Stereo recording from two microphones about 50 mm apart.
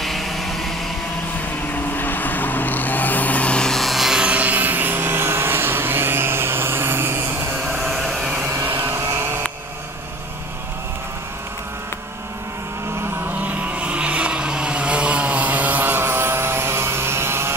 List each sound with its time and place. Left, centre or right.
0.0 s vehicle: centre
1.7 s vehicle: left
3.5 s vehicle: centre
3.8 s rub: centre
4.1 s vehicle: right
7.9 s hair dryer: centre
8.6 s vehicle: right
13.4 s vehicle: right